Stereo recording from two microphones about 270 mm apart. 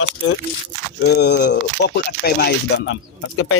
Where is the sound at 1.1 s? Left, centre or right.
Left.